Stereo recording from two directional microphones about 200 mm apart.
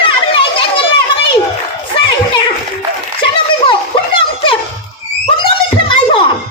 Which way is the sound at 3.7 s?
25° left (ahead or behind).